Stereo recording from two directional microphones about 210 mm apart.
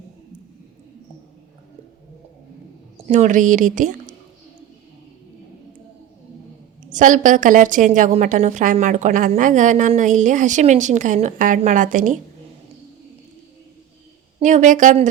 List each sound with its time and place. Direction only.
3.1 s a woman's voice: 35° right (ahead or behind)
6.9 s a woman's voice: 35° right (ahead or behind)
14.3 s a woman's voice: 35° right (ahead or behind)